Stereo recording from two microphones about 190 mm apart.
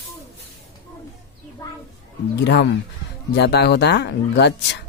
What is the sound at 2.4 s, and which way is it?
Speech, 65° left (ahead or behind).